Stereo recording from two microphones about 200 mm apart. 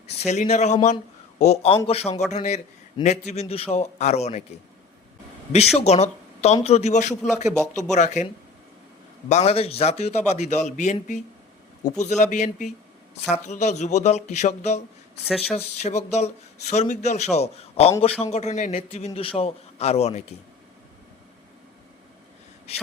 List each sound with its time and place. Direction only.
0.1 s speech: 35° left (ahead or behind)
5.7 s speech: 30° left (ahead or behind)
9.3 s speech: 30° left (ahead or behind)
15.2 s speech: centre (ahead or behind)
15.5 s speech: 30° left (ahead or behind)